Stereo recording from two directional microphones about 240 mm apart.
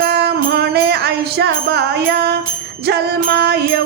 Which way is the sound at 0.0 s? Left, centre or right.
Right.